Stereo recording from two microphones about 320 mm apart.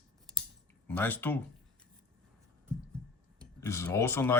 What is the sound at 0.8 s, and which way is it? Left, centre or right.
Speech, centre.